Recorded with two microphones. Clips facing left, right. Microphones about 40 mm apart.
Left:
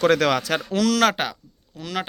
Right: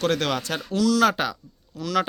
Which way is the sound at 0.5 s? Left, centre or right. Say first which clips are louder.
Left 1 dB; left.